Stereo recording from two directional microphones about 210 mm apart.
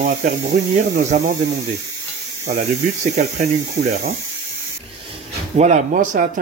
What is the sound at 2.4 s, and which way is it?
Speech, 35° right (ahead or behind).